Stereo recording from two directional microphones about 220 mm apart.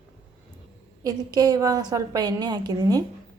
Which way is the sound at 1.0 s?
15° right (ahead or behind).